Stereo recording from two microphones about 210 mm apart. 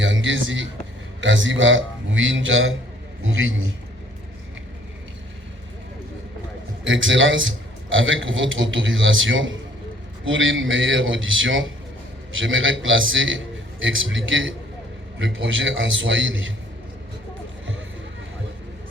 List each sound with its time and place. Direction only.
0.0 s a sound: 65° right (ahead or behind)
1.2 s a man's voice: 65° right (ahead or behind)
6.8 s a man's voice: 65° right (ahead or behind)